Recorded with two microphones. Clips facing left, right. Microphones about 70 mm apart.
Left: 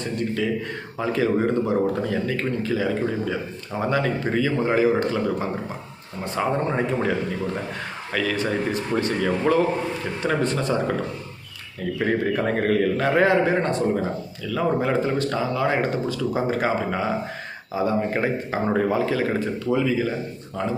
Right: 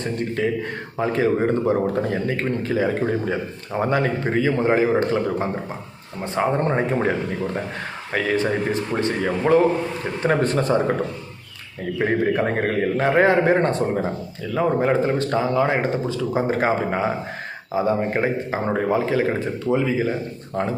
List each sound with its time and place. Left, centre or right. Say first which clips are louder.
0.0 s speech: right 2 dB; right
10.2 s speech: right 4 dB; right
11.9 s speech: right 3 dB; right
14.4 s speech: right 3 dB; right
18.2 s speech: right 1 dB; centre
18.9 s speech: right 2 dB; right